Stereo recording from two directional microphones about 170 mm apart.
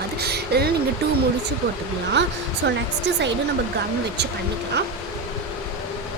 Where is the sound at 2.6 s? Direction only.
90° right.